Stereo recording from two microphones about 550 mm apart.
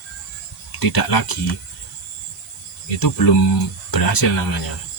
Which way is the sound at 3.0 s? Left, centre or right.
Left.